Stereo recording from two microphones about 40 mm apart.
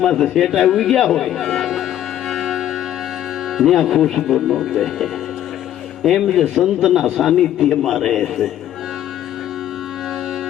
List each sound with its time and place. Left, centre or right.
0.0 s a man's voice: centre
2.3 s music: centre
3.6 s speech: centre
3.9 s a man's voice: centre
4.2 s speech: centre
4.7 s a man's voice: centre